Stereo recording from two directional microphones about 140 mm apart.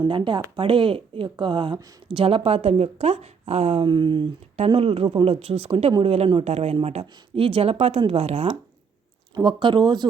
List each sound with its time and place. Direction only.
0.0 s speech: 35° right (ahead or behind)
3.8 s speech: 35° right (ahead or behind)
9.3 s speech: 35° right (ahead or behind)